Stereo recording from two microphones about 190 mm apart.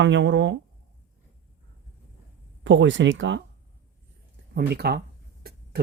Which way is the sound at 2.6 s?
75° right (ahead or behind).